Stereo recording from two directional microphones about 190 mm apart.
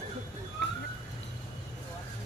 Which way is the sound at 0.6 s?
65° left (ahead or behind).